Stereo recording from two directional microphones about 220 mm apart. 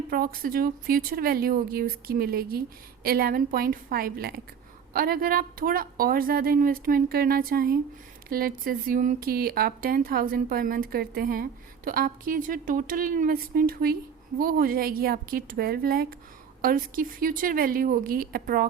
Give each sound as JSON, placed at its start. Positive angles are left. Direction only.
{"t": 0.1, "sound": "speech", "side_deg": -40}